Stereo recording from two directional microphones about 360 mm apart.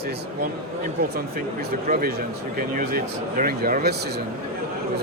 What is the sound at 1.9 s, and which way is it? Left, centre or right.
Speech, right.